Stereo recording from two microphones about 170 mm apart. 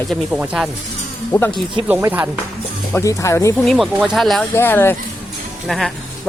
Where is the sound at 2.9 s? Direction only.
15° left (ahead or behind).